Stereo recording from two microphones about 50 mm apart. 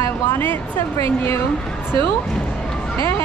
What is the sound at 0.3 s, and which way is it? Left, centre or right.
Speech, left.